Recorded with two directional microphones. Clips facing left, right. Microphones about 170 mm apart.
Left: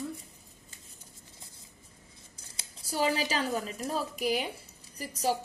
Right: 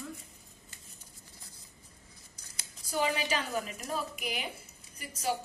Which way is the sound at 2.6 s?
35° left (ahead or behind).